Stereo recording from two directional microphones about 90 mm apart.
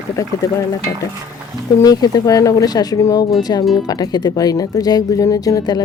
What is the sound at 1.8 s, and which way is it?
Speech, 45° left (ahead or behind).